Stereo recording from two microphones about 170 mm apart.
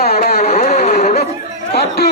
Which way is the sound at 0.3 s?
40° left (ahead or behind).